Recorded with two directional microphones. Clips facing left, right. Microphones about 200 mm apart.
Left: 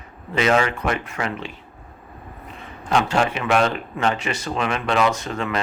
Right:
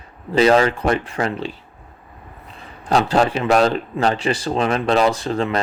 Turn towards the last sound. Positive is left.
turn(degrees=-30)  # may be behind; listen again after turning